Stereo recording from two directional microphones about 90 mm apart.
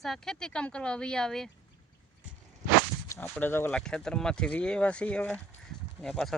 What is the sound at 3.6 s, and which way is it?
Speech, 10° left (ahead or behind).